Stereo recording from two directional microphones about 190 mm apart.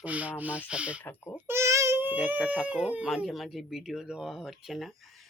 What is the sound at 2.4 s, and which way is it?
Speech, 5° right (ahead or behind).